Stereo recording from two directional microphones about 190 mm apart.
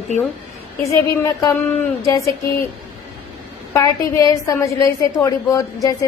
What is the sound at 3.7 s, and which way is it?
A woman's voice, 15° left (ahead or behind).